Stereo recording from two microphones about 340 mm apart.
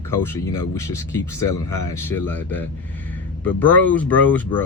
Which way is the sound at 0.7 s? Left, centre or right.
Centre.